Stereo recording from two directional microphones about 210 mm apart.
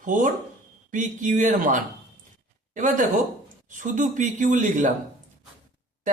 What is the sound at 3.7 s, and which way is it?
Speech, 35° right (ahead or behind).